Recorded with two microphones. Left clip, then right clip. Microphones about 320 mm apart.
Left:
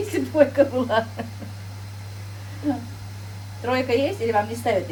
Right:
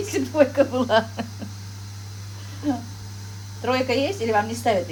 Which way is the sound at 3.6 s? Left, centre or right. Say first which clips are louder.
Even; right.